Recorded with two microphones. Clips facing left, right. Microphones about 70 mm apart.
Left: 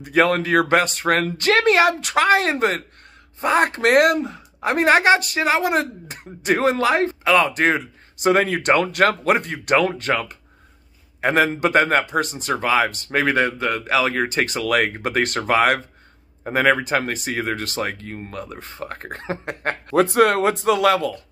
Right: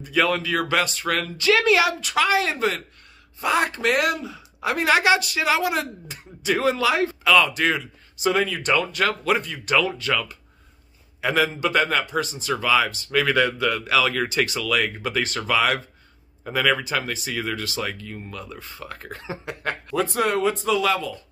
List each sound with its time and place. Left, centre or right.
0.0 s speech: left